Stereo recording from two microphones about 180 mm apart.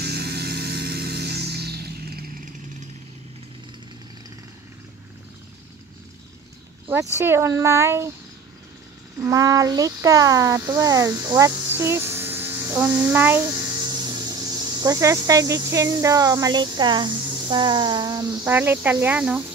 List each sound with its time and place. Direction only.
0.0 s music: 65° right (ahead or behind)
7.2 s speech: 15° right (ahead or behind)
9.2 s speech: 20° right (ahead or behind)
18.3 s speech: 10° right (ahead or behind)